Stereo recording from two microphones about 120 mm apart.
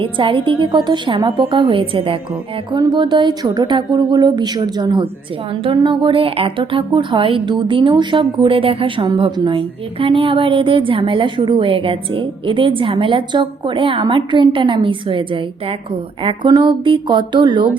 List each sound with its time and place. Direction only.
0.0 s a woman's voice: 45° right (ahead or behind)
2.7 s a woman's voice: 35° right (ahead or behind)
16.5 s a woman's voice: 30° right (ahead or behind)
16.8 s a woman's voice: 45° right (ahead or behind)